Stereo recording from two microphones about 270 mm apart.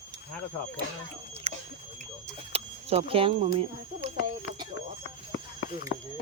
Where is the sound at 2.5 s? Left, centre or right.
Right.